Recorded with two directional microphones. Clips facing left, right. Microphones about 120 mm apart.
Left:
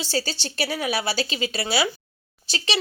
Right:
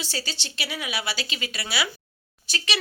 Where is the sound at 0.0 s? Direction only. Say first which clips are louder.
Left 7 dB; 30° left (ahead or behind).